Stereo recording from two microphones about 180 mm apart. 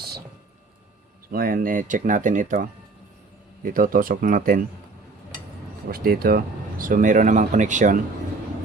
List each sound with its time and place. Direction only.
1.3 s speech: 55° right (ahead or behind)
5.9 s speech: 55° right (ahead or behind)